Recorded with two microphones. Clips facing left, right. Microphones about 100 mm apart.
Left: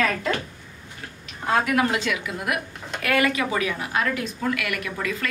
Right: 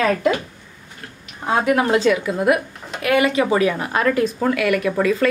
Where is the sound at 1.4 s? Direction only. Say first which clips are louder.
Right 3 dB; 25° right (ahead or behind).